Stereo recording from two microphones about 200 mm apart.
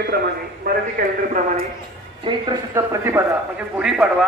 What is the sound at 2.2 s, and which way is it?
A man's voice, 20° right (ahead or behind).